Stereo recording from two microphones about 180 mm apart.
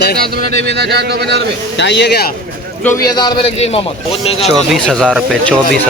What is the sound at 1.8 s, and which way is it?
Speech, 75° left (ahead or behind).